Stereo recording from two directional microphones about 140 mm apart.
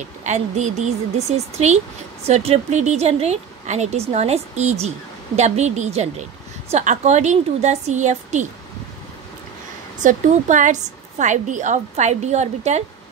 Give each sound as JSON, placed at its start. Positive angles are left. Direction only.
{"t": 0.2, "sound": "a woman's voice", "side_deg": -55}
{"t": 10.0, "sound": "a woman's voice", "side_deg": -65}